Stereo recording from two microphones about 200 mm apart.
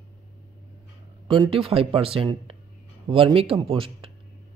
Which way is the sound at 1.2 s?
25° right (ahead or behind).